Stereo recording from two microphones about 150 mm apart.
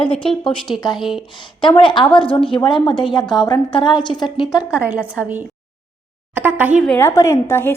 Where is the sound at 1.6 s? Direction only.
35° left (ahead or behind).